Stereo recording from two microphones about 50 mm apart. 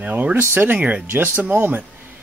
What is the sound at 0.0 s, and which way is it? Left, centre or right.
Speech, right.